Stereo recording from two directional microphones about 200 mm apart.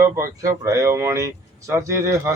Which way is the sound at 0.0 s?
15° right (ahead or behind).